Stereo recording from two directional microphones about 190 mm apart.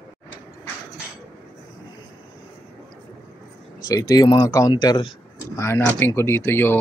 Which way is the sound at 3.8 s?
20° left (ahead or behind).